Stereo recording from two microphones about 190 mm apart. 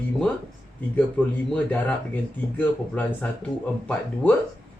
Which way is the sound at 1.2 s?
10° left (ahead or behind).